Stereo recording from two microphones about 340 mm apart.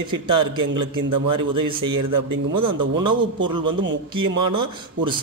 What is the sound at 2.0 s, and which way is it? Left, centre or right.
Speech, right.